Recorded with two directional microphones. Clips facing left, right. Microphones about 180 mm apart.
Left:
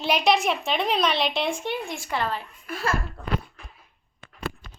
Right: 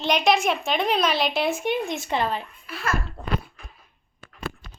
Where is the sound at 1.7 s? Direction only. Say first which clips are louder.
Right 4 dB; 20° right (ahead or behind).